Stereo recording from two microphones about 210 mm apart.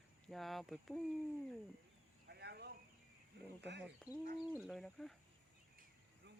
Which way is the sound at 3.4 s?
55° right (ahead or behind).